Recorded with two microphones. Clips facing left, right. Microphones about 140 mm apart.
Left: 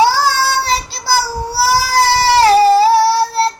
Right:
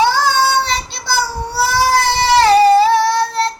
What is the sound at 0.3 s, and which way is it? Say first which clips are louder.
Child singing: right 1 dB; 20° right (ahead or behind).